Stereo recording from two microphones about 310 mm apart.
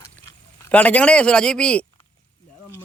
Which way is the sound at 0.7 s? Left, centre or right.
Centre.